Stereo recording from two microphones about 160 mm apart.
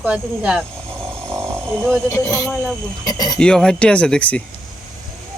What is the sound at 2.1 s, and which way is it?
Speech, 20° left (ahead or behind).